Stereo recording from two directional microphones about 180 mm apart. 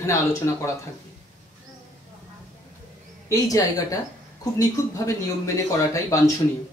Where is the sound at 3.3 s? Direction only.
20° left (ahead or behind).